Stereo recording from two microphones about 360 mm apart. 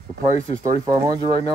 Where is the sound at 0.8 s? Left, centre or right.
Centre.